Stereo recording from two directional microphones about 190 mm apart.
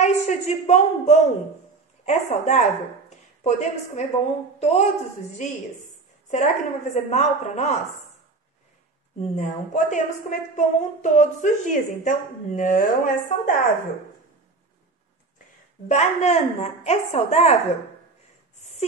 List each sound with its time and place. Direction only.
0.0 s a woman's voice: 35° left (ahead or behind)
6.3 s a woman's voice: 35° left (ahead or behind)
9.2 s a woman's voice: 40° left (ahead or behind)
15.9 s a woman's voice: 35° left (ahead or behind)
18.6 s a sound: 35° left (ahead or behind)